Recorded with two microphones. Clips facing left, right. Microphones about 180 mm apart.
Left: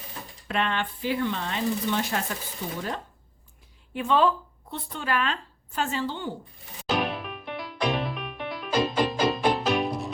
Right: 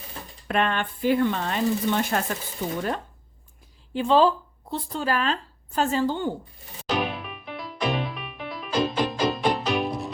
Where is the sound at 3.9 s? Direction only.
30° right (ahead or behind).